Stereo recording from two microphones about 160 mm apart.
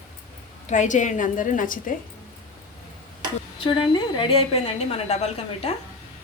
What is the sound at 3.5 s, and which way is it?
A woman's voice, 35° left (ahead or behind).